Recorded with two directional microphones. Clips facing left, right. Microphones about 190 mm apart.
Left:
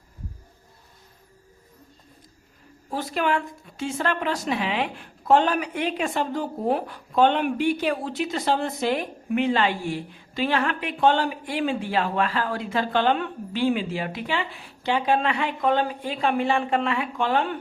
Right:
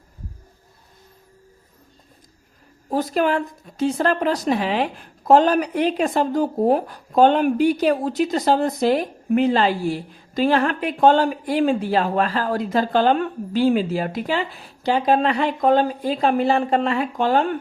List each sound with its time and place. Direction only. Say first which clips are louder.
2.9 s a woman's voice: right 5 dB; 40° right (ahead or behind)